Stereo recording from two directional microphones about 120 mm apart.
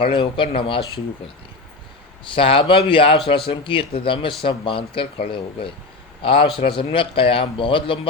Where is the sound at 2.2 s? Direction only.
45° left (ahead or behind).